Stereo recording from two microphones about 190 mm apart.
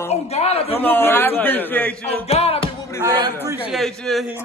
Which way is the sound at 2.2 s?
30° left (ahead or behind).